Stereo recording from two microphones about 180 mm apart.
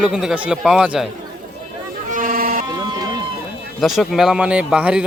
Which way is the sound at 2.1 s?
45° right (ahead or behind).